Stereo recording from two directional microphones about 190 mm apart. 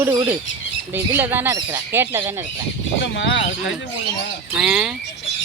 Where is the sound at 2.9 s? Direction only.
70° left (ahead or behind).